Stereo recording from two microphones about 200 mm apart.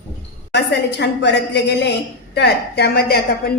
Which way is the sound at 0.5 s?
60° left (ahead or behind).